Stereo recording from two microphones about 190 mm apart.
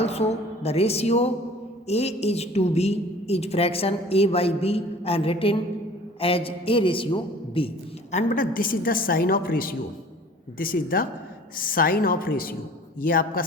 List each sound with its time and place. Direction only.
0.0 s a woman's voice: 35° left (ahead or behind)
8.1 s a woman's voice: 45° left (ahead or behind)